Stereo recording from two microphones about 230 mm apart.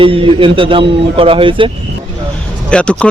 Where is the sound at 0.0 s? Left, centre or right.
Right.